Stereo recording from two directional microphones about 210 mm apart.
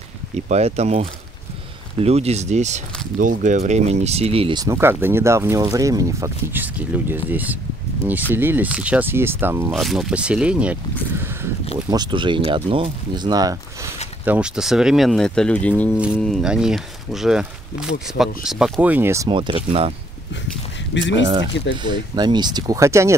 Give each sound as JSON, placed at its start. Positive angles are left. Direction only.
{"t": 0.5, "sound": "speech", "side_deg": -30}
{"t": 11.9, "sound": "speech", "side_deg": -20}
{"t": 14.2, "sound": "speech", "side_deg": -5}
{"t": 19.2, "sound": "speech", "side_deg": -25}
{"t": 20.9, "sound": "speech", "side_deg": 60}
{"t": 21.8, "sound": "speech", "side_deg": -20}